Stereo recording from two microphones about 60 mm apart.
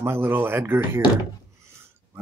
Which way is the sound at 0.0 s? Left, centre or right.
Right.